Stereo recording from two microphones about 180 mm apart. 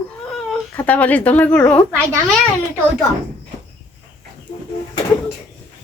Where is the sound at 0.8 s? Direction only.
10° left (ahead or behind).